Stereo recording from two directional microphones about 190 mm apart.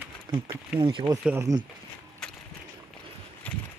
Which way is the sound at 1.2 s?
15° right (ahead or behind).